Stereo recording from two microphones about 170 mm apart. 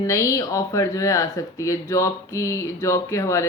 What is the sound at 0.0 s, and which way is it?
Speech, 20° left (ahead or behind).